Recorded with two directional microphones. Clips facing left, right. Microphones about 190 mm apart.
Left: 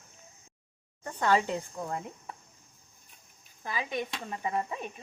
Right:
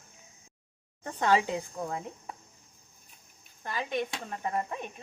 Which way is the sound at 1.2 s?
15° right (ahead or behind).